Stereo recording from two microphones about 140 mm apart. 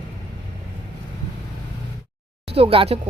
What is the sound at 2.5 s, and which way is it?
Speech, 45° right (ahead or behind).